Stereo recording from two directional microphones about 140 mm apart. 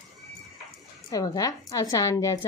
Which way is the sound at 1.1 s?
25° left (ahead or behind).